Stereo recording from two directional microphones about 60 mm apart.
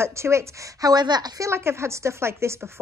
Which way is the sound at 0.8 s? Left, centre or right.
Right.